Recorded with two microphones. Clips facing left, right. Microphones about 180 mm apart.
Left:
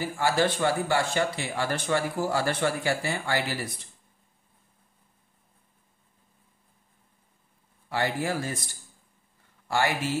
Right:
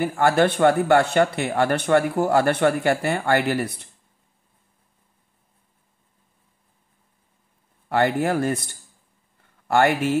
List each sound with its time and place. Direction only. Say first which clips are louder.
0.0 s speech: right 6 dB; 60° right (ahead or behind)
7.9 s speech: right 7 dB; 60° right (ahead or behind)